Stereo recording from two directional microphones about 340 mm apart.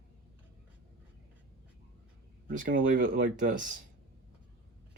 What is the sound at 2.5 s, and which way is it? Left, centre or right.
Speech, right.